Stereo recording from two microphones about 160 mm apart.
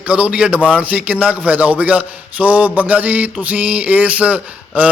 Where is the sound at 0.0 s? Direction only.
5° right (ahead or behind).